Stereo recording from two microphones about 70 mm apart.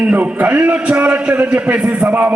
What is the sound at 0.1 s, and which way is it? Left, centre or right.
A man's voice, right.